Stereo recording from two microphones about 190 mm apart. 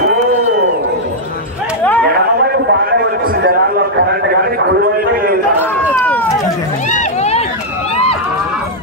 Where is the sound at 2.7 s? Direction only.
55° right (ahead or behind).